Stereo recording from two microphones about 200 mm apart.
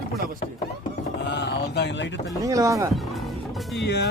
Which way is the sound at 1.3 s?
60° left (ahead or behind).